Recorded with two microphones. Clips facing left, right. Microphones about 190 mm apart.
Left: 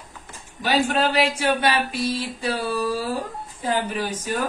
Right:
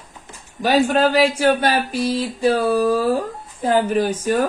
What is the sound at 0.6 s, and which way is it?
A man's voice, 40° right (ahead or behind).